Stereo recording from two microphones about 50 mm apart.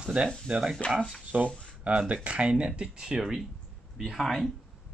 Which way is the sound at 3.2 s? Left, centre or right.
Centre.